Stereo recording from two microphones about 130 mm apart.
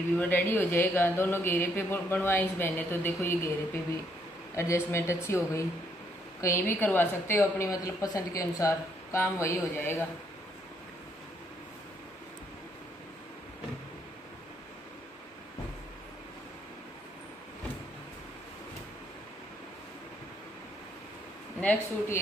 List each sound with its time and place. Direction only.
0.2 s speech: 15° left (ahead or behind)
4.6 s a woman's voice: 20° left (ahead or behind)
21.5 s speech: 15° left (ahead or behind)